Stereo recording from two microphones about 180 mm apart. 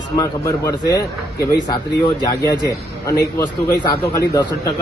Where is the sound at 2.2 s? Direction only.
20° left (ahead or behind).